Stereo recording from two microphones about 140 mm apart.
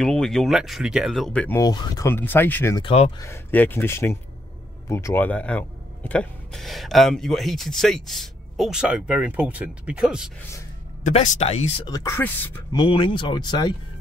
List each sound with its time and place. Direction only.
0.0 s speech: 5° left (ahead or behind)
1.6 s speech: 30° left (ahead or behind)
2.0 s speech: 15° left (ahead or behind)
2.8 s speech: 45° left (ahead or behind)
3.2 s speech: 15° left (ahead or behind); by 10.3 s 5° right (ahead or behind)
11.1 s speech: 50° left (ahead or behind)
11.8 s speech: 25° left (ahead or behind)
12.7 s speech: 35° left (ahead or behind)